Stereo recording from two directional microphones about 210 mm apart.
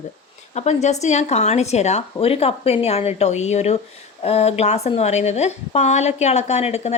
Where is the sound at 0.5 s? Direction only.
30° left (ahead or behind).